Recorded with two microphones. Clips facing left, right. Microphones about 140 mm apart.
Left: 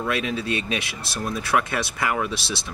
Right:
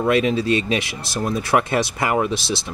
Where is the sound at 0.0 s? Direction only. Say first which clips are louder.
Right 8 dB; 20° right (ahead or behind).